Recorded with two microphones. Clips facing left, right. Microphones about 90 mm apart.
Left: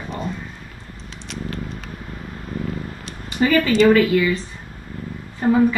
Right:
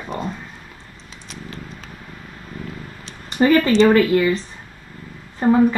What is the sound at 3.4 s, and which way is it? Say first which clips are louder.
Speech: right 2 dB; 40° right (ahead or behind).